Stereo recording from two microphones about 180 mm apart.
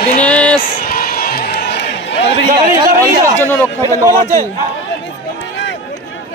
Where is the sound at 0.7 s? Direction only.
55° left (ahead or behind); by 2.1 s 75° left (ahead or behind).